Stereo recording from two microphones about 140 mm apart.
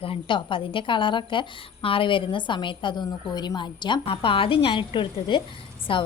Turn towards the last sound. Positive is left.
turn(degrees=40)  # may be behind; listen again after turning